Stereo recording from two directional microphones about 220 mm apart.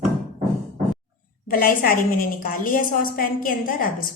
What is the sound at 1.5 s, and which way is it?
A woman's voice, 40° left (ahead or behind).